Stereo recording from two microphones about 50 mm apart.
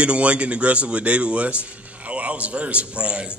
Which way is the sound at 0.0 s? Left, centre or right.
Right.